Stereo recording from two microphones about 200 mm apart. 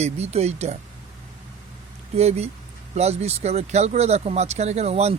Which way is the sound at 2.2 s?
30° right (ahead or behind).